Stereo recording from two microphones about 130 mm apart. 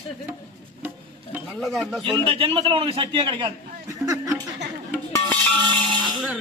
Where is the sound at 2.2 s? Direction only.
45° right (ahead or behind).